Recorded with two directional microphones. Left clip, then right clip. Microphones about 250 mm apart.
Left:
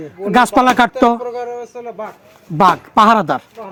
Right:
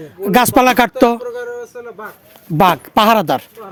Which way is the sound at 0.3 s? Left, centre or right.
Right.